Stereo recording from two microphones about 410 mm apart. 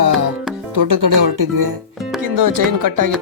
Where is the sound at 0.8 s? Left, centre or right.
Right.